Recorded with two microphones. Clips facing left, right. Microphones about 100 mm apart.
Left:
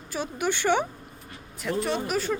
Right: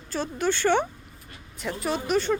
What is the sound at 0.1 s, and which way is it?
Speech, 10° left (ahead or behind).